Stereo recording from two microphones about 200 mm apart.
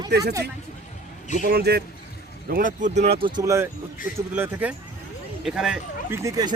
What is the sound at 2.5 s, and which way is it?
Speech, 45° right (ahead or behind).